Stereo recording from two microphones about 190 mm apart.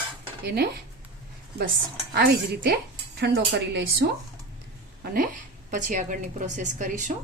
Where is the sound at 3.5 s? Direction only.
70° right (ahead or behind).